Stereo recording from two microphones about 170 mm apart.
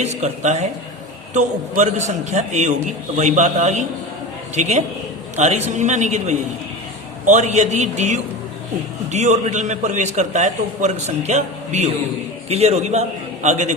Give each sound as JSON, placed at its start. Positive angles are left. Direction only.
{"t": 0.0, "sound": "a man's voice", "side_deg": -45}